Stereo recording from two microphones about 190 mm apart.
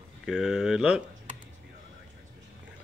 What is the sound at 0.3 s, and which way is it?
Speech, centre (ahead or behind).